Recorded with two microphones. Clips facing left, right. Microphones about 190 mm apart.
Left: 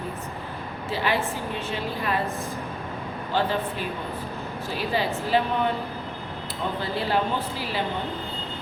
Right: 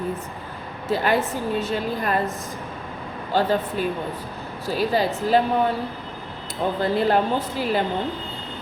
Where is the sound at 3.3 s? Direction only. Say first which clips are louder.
Right 4 dB; 40° right (ahead or behind).